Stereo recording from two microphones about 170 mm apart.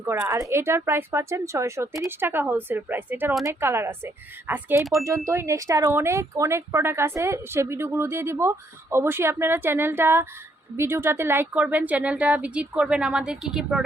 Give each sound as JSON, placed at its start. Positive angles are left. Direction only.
{"t": 0.1, "sound": "speech", "side_deg": -15}